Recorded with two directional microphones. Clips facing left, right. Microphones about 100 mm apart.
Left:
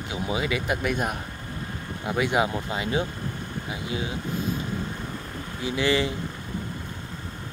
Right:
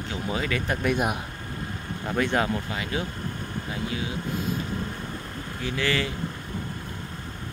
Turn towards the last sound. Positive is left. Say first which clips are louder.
# left 3 dB
turn(degrees=20)  # may be behind; listen again after turning